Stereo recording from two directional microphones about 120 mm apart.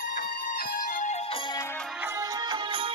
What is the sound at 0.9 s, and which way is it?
Music, 85° left.